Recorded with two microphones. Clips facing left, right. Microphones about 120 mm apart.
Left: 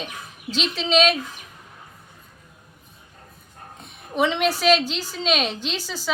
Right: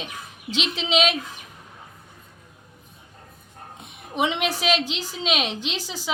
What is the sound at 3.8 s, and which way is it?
A woman's voice, 15° right (ahead or behind).